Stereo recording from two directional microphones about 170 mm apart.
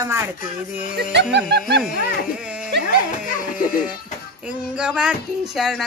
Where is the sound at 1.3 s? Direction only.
80° right.